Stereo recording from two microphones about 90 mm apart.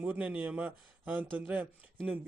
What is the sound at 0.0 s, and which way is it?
A man's voice, 15° right (ahead or behind).